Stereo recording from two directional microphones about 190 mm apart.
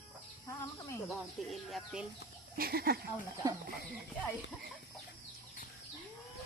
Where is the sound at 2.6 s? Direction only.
55° right (ahead or behind).